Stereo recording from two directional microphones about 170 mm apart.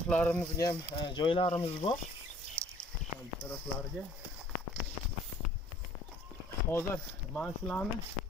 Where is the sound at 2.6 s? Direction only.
15° right (ahead or behind).